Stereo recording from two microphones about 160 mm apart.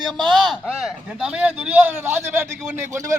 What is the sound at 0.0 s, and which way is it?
A man's voice, centre (ahead or behind).